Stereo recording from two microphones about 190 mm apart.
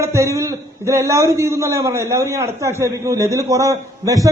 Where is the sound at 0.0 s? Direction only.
15° right (ahead or behind).